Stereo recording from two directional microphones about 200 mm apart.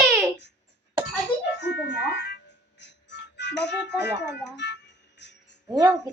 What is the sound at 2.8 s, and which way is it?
Music, 60° left (ahead or behind).